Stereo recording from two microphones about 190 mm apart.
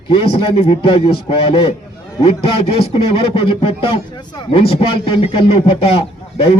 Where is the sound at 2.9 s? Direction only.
30° left (ahead or behind).